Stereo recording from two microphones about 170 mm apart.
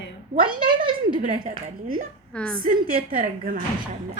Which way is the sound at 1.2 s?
50° right (ahead or behind).